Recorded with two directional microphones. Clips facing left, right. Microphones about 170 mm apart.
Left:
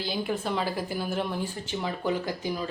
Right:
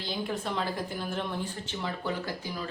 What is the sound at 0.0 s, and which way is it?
A woman's voice, 5° left (ahead or behind).